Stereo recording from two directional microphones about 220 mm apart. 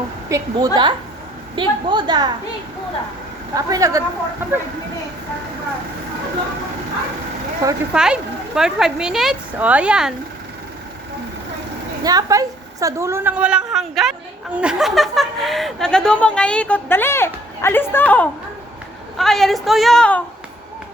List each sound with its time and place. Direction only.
0.3 s a woman's voice: 15° right (ahead or behind)
3.5 s speech: 15° right (ahead or behind)
7.6 s speech: 15° right (ahead or behind)
7.9 s a woman's voice: 5° right (ahead or behind)
12.0 s a woman's voice: 15° right (ahead or behind); by 20.2 s 5° left (ahead or behind)